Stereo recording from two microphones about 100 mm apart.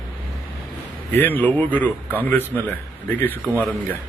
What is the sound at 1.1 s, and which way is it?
A man's voice, 20° left (ahead or behind).